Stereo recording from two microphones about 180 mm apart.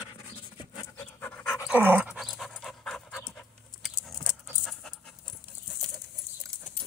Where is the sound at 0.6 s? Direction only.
20° left (ahead or behind).